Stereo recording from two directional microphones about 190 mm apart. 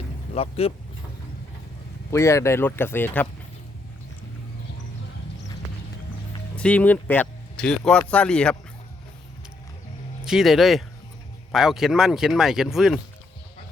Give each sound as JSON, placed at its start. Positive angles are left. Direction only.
{"t": 0.3, "sound": "speech", "side_deg": 30}
{"t": 2.0, "sound": "speech", "side_deg": 15}
{"t": 6.6, "sound": "speech", "side_deg": 5}
{"t": 10.2, "sound": "speech", "side_deg": 0}